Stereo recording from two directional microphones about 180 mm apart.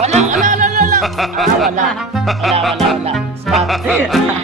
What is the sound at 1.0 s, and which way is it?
Speech, centre (ahead or behind).